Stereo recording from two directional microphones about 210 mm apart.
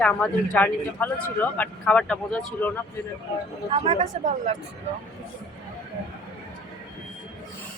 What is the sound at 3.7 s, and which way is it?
Speech, 30° right (ahead or behind).